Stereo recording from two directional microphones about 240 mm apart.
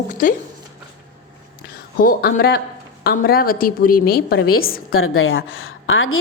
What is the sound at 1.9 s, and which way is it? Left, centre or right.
A woman's voice, left.